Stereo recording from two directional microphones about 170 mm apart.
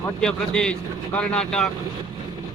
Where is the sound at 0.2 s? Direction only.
5° left (ahead or behind).